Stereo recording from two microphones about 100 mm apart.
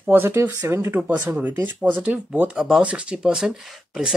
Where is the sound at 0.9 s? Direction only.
15° right (ahead or behind).